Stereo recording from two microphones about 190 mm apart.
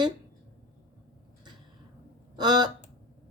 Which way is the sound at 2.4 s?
20° right (ahead or behind).